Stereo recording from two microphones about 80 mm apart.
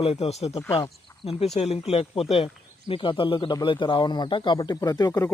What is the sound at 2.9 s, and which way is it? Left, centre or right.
Speech, left.